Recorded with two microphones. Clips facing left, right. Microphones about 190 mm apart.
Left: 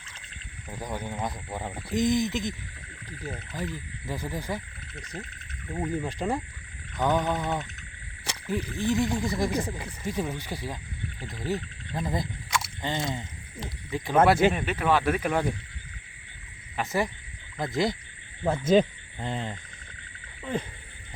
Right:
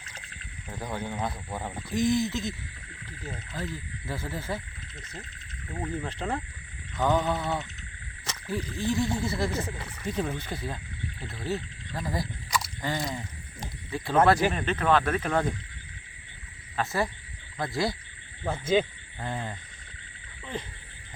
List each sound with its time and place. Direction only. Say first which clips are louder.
0.7 s speech: even; 15° left (ahead or behind)
3.6 s speech: even; 15° left (ahead or behind)
14.5 s speech: right 1 dB; 10° left (ahead or behind)
16.7 s speech: left 1 dB; 15° left (ahead or behind)
19.2 s speech: left 2 dB; 20° left (ahead or behind)
20.4 s a sound: left 5 dB; 45° left (ahead or behind)